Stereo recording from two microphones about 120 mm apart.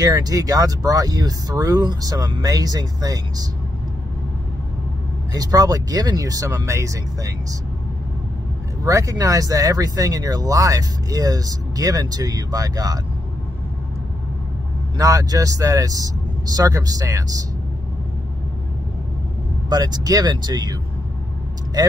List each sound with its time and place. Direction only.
0.0 s speech: 30° right (ahead or behind)
5.3 s speech: 30° right (ahead or behind)
8.8 s speech: 25° right (ahead or behind)
15.0 s speech: 30° right (ahead or behind)
19.7 s speech: 35° right (ahead or behind)